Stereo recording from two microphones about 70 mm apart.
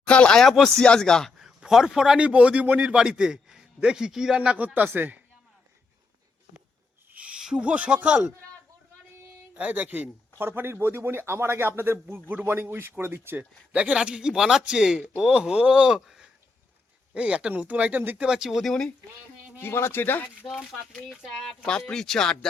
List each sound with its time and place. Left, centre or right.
0.0 s speech: centre
1.5 s a man's voice: centre; by 5.2 s right
7.1 s speech: centre
9.6 s speech: right
13.4 s speech: centre
16.0 s a sound: centre
17.2 s speech: centre
18.3 s speech: centre
19.6 s speech: left
20.5 s speech: centre